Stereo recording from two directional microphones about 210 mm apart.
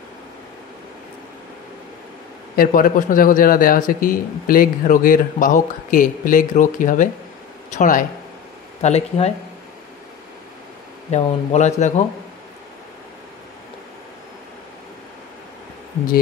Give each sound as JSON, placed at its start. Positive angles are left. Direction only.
{"t": 2.5, "sound": "speech", "side_deg": 40}
{"t": 11.1, "sound": "speech", "side_deg": 35}